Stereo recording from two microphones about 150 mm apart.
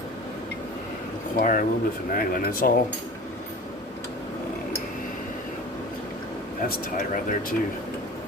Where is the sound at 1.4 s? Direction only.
65° left (ahead or behind).